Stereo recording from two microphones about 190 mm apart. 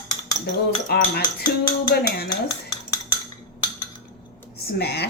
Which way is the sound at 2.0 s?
55° left (ahead or behind).